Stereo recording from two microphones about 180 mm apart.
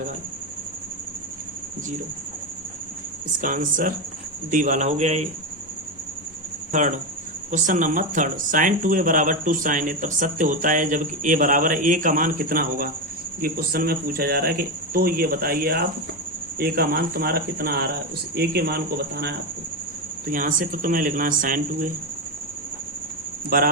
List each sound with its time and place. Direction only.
3.4 s speech: 50° right (ahead or behind)
6.7 s speech: 45° right (ahead or behind); by 19.3 s 60° right (ahead or behind)
20.2 s speech: 50° right (ahead or behind)
23.5 s speech: 55° right (ahead or behind)